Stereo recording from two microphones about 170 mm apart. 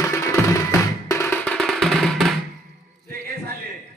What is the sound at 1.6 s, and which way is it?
Music, centre (ahead or behind).